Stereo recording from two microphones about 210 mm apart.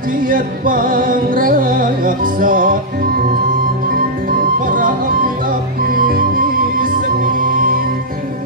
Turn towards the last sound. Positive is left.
turn(degrees=-40)  # may be behind; listen again after turning